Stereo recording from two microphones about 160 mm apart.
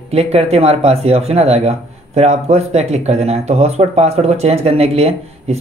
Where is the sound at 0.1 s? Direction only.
40° right (ahead or behind).